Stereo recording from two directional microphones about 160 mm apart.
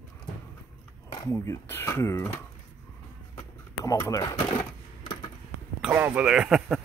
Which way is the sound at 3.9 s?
20° left (ahead or behind).